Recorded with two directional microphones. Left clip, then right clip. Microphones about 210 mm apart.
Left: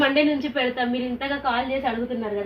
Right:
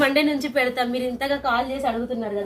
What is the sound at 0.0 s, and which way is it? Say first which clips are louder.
Speech: even; 25° right (ahead or behind).